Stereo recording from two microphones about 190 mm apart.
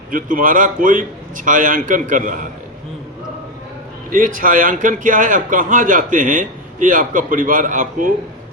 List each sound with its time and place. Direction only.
0.1 s a man's voice: 45° right (ahead or behind)
4.1 s a man's voice: 45° right (ahead or behind)